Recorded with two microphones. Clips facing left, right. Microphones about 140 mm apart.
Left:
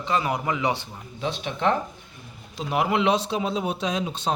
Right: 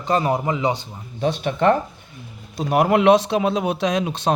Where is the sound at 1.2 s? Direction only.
50° right (ahead or behind); by 4.3 s 65° right (ahead or behind).